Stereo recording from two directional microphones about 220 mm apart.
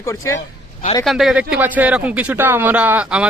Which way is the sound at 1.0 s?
Centre (ahead or behind).